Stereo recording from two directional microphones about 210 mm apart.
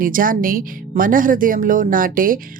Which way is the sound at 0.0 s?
40° right (ahead or behind).